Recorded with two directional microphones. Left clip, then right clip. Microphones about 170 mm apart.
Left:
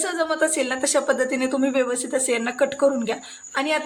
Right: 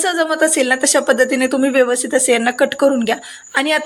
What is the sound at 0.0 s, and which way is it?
A woman's voice, 20° right (ahead or behind).